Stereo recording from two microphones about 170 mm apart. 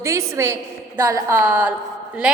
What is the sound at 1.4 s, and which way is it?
Speech, 5° right (ahead or behind).